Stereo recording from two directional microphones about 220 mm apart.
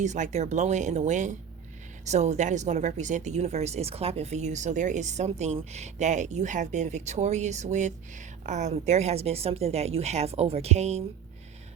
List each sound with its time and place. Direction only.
0.0 s speech: 35° right (ahead or behind)